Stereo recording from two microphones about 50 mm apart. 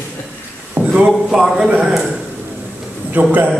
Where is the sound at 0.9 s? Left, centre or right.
Centre.